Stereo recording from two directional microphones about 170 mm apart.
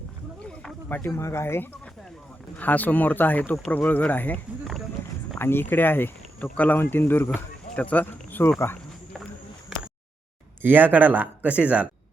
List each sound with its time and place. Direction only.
0.4 s speech: 5° left (ahead or behind)
9.7 s a sound: centre (ahead or behind)
10.6 s speech: 10° right (ahead or behind)